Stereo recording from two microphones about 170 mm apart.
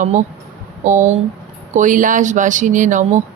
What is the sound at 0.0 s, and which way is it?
Speech, 45° right (ahead or behind).